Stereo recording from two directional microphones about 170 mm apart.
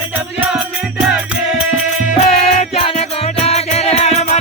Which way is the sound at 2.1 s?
40° left (ahead or behind).